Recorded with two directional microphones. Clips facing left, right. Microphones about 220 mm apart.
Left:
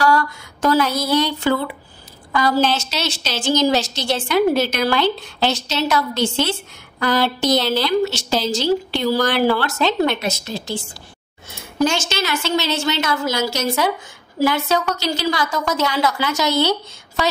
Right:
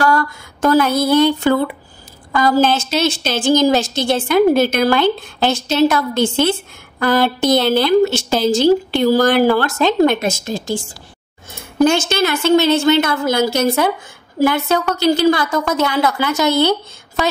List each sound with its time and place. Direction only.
0.0 s a woman's voice: 50° right (ahead or behind)
11.8 s a woman's voice: 55° right (ahead or behind)